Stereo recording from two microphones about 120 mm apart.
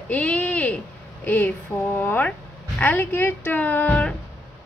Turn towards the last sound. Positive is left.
turn(degrees=10)  # may be behind; listen again after turning